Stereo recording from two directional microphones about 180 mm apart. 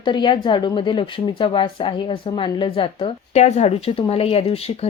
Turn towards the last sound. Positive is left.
turn(degrees=35)  # may be behind; listen again after turning